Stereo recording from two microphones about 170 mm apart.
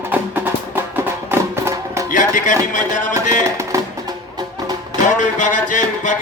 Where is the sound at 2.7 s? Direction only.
45° left (ahead or behind).